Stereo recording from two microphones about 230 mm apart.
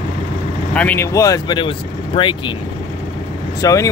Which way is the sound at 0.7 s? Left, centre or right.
Centre.